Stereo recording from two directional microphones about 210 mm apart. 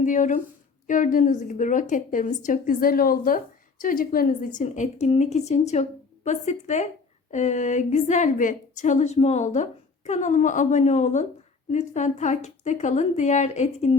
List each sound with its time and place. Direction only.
0.0 s a woman's voice: 40° left (ahead or behind)